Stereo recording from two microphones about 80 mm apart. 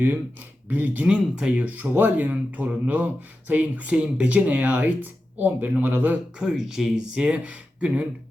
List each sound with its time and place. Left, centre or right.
0.7 s speech: right
6.4 s speech: centre